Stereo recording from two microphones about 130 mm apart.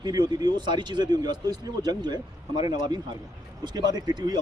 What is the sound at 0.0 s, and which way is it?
A man's voice, 30° right (ahead or behind).